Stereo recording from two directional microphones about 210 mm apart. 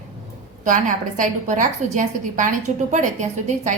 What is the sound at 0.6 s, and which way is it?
A woman's voice, 40° right (ahead or behind).